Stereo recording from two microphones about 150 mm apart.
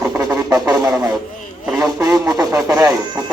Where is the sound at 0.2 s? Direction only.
25° right (ahead or behind).